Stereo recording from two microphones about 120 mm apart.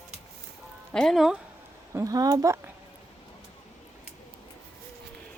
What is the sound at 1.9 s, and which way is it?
Speech, 30° right (ahead or behind).